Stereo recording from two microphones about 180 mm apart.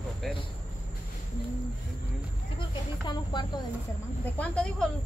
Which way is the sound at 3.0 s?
25° left (ahead or behind).